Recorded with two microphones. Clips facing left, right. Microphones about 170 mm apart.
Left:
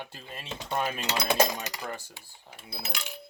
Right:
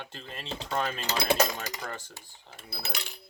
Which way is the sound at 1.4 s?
15° left (ahead or behind).